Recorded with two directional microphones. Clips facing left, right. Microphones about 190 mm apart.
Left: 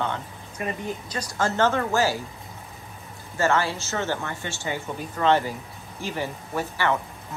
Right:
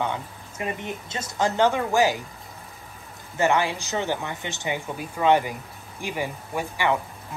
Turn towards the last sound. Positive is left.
turn(degrees=-15)  # may be behind; listen again after turning